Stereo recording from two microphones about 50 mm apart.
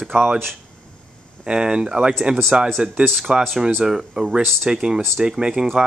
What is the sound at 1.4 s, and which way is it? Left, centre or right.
Speech, centre.